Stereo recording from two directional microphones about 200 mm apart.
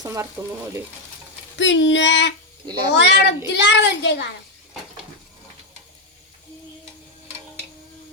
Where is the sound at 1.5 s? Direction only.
65° left (ahead or behind).